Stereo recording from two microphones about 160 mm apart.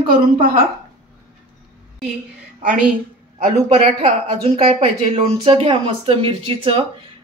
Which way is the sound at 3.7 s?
45° right (ahead or behind).